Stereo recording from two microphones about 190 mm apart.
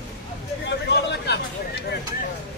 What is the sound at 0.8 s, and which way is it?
Speech, 65° left (ahead or behind).